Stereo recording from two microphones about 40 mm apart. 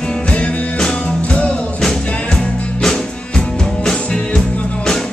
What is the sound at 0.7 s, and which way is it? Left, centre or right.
Music, left.